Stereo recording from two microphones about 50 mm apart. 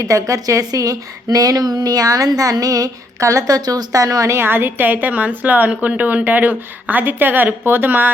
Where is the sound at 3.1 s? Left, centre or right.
Right.